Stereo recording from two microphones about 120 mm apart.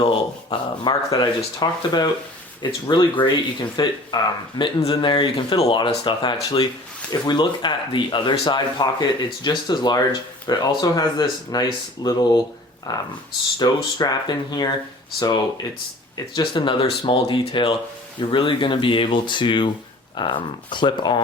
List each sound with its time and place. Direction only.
0.0 s speech: 45° left (ahead or behind)
16.1 s speech: 40° left (ahead or behind)